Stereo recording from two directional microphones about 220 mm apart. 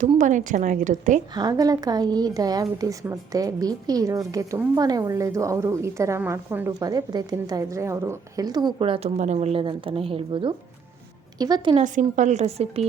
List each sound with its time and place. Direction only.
0.0 s a woman's voice: 35° right (ahead or behind)
1.3 s a woman's voice: 20° right (ahead or behind)
11.8 s a woman's voice: 35° right (ahead or behind)